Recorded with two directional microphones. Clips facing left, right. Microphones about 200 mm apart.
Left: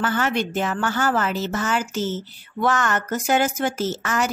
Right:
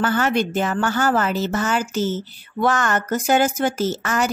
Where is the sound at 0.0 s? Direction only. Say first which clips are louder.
Right 3 dB; 40° right (ahead or behind).